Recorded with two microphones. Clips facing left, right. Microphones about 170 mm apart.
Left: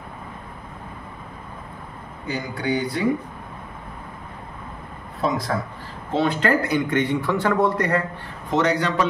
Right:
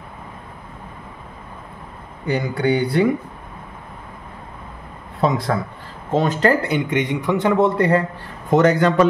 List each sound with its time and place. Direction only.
2.2 s speech: 65° right (ahead or behind)
6.1 s speech: 40° right (ahead or behind)
6.7 s a man's voice: 15° right (ahead or behind)
8.5 s a man's voice: 50° right (ahead or behind)